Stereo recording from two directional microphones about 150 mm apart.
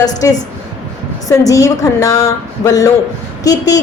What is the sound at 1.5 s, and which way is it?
A woman's voice, 20° left (ahead or behind).